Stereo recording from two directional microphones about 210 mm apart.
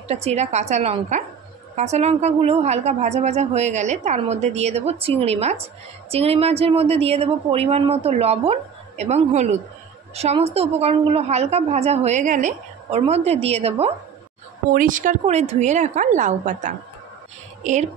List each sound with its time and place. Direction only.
0.1 s a woman's voice: 30° right (ahead or behind)
14.7 s a woman's voice: 40° right (ahead or behind)